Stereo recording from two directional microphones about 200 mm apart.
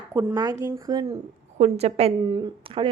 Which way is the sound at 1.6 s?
30° right (ahead or behind).